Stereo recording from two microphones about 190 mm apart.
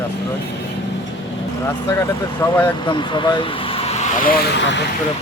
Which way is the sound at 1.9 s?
10° left (ahead or behind).